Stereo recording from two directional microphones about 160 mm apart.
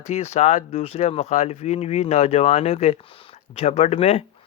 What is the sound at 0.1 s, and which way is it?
Speech, 45° left (ahead or behind).